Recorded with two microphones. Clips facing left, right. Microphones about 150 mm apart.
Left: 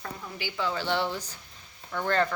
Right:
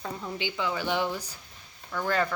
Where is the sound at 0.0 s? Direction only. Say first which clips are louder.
Right 4 dB; 20° right (ahead or behind).